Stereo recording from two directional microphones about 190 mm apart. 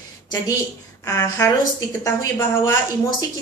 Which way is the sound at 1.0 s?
20° left (ahead or behind).